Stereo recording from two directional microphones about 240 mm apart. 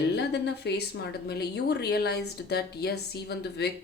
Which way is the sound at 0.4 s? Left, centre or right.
Left.